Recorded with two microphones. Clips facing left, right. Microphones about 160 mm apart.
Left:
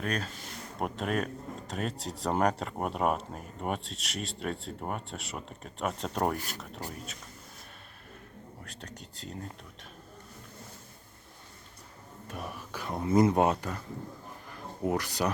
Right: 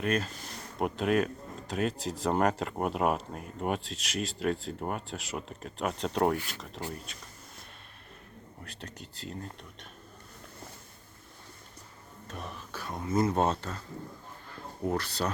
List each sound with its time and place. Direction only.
0.0 s speech: 5° right (ahead or behind)
6.3 s speech: 40° left (ahead or behind)
6.9 s speech: centre (ahead or behind)
8.6 s speech: centre (ahead or behind)
12.3 s whispering: 10° left (ahead or behind)
12.9 s speech: 25° left (ahead or behind)
14.8 s speech: 15° left (ahead or behind)